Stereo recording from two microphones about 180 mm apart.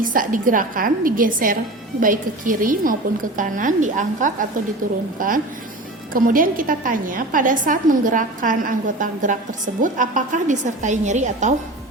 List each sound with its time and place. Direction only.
0.0 s a woman's voice: 50° right (ahead or behind)